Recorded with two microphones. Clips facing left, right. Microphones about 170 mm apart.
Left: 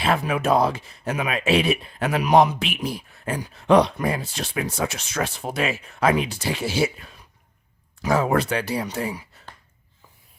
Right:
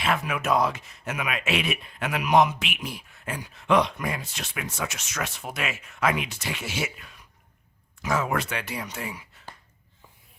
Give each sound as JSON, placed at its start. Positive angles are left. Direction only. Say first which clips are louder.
{"t": 0.0, "sound": "speech", "louder": "left 5 dB", "side_deg": 35}